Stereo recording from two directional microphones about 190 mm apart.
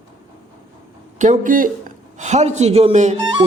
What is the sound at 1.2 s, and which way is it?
A man's voice, 45° right (ahead or behind).